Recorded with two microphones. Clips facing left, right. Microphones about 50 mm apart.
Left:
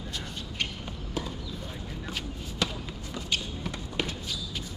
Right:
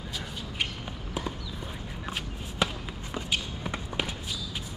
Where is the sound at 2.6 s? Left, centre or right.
Centre.